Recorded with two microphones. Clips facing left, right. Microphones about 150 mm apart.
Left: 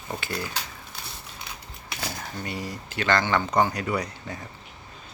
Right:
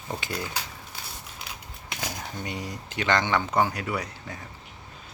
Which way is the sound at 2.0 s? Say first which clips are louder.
Left 1 dB; 15° right (ahead or behind).